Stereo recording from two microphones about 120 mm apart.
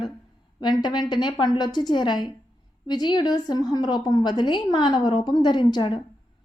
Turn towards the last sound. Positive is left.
turn(degrees=40)  # may be behind; listen again after turning